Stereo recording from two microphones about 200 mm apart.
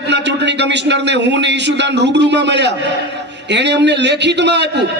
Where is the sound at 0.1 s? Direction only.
60° right (ahead or behind).